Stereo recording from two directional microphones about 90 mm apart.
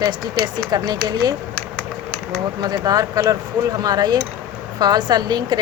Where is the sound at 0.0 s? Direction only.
55° right (ahead or behind).